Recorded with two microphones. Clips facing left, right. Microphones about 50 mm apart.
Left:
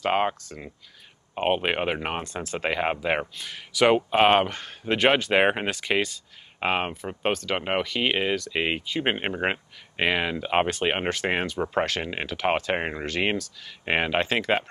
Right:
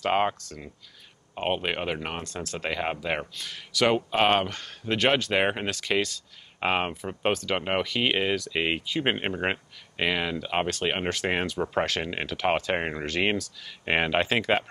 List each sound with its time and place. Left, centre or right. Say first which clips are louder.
0.0 s speech: left 1 dB; centre
1.3 s speech: left 4 dB; centre
6.6 s speech: even; centre
11.1 s speech: left 1 dB; centre